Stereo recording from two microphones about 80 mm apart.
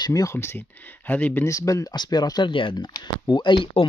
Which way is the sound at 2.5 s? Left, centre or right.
Left.